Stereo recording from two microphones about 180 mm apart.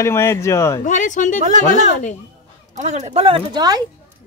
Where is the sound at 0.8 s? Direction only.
45° left (ahead or behind).